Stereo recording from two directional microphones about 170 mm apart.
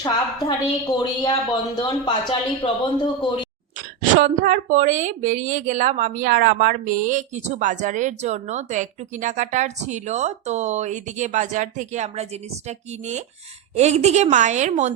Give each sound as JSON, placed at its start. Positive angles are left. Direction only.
{"t": 0.4, "sound": "a woman's voice", "side_deg": 25}
{"t": 3.8, "sound": "a woman's voice", "side_deg": -50}